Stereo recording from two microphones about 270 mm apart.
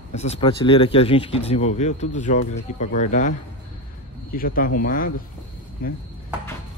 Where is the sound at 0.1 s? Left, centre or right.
Left.